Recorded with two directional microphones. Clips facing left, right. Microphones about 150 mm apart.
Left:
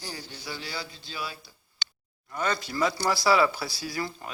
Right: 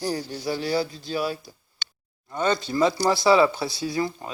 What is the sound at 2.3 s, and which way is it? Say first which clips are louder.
Speech: right 6 dB; 25° right (ahead or behind).